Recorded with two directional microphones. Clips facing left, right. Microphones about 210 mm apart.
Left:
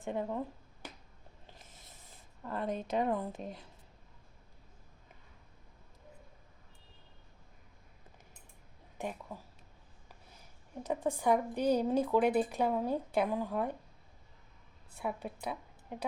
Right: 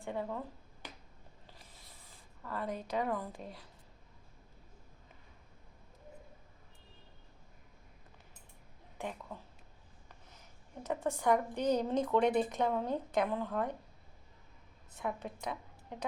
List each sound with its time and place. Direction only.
0.0 s a woman's voice: 15° left (ahead or behind)
1.5 s a sound: 20° left (ahead or behind)
2.4 s a woman's voice: 25° left (ahead or behind)
9.0 s speech: 10° left (ahead or behind)
10.8 s a woman's voice: 10° left (ahead or behind)
14.9 s a woman's voice: 10° left (ahead or behind)